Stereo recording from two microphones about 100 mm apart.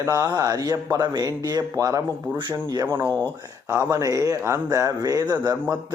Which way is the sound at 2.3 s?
50° right (ahead or behind).